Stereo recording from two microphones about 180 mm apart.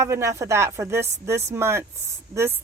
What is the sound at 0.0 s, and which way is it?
A woman's voice, 15° right (ahead or behind).